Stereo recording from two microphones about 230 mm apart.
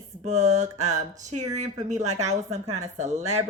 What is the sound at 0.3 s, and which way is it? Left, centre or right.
Speech, right.